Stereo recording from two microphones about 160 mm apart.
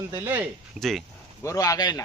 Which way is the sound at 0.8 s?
Centre (ahead or behind).